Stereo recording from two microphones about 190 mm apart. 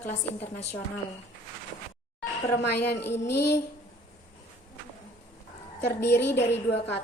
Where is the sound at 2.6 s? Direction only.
60° left (ahead or behind).